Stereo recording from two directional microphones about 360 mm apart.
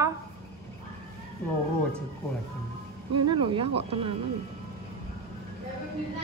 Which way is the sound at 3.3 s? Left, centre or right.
Centre.